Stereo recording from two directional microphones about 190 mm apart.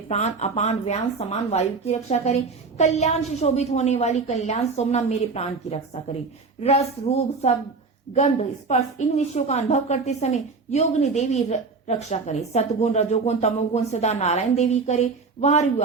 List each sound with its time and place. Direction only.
0.1 s a woman's voice: 35° left (ahead or behind)